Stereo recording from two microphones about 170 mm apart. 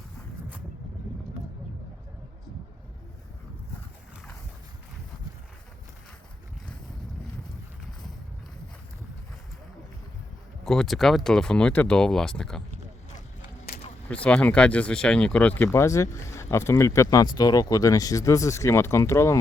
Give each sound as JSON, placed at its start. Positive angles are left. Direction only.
{"t": 10.7, "sound": "speech", "side_deg": 0}
{"t": 14.1, "sound": "speech", "side_deg": 5}